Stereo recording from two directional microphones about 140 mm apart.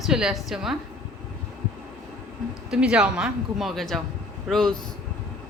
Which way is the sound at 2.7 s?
5° right (ahead or behind).